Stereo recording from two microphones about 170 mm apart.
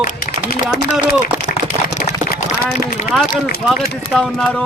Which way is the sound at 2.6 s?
60° left (ahead or behind).